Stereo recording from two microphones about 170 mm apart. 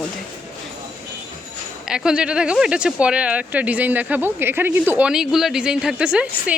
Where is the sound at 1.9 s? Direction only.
5° right (ahead or behind).